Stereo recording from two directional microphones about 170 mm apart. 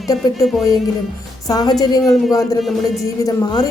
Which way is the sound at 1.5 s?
20° left (ahead or behind).